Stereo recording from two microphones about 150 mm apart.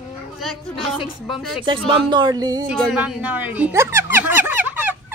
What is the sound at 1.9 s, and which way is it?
Speech, 30° right (ahead or behind).